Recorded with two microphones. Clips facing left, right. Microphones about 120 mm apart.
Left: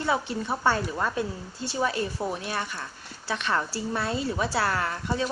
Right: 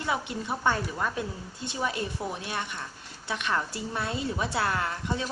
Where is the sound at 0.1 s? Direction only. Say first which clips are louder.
Left 3 dB; 30° left (ahead or behind).